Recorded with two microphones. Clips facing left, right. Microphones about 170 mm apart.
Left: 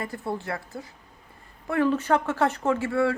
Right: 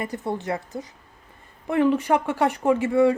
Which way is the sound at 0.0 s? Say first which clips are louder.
Right 3 dB; 20° right (ahead or behind).